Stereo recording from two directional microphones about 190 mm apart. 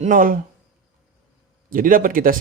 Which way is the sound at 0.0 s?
45° right (ahead or behind).